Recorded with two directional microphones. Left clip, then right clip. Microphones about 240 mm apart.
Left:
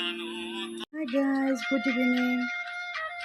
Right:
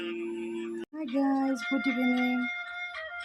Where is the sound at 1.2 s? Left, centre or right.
Centre.